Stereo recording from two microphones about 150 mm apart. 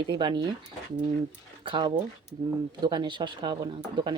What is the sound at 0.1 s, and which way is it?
Speech, 30° right (ahead or behind).